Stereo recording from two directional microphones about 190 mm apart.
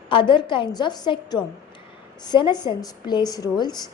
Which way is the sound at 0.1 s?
25° left (ahead or behind).